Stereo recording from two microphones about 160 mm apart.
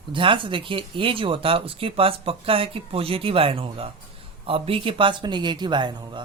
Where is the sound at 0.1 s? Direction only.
30° right (ahead or behind).